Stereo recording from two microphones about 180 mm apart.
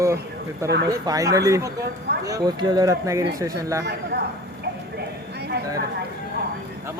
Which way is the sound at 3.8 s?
65° right (ahead or behind).